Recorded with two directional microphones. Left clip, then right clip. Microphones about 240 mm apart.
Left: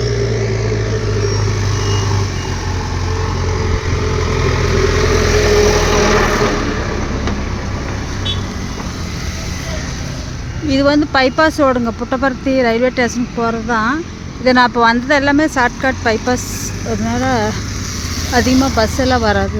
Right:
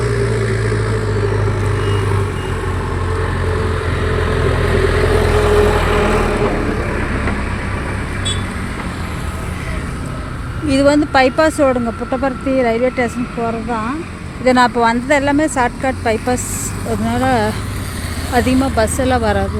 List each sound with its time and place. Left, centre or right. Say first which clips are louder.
4.3 s vehicle: even; left
10.7 s speech: even; centre
14.4 s speech: left 1 dB; centre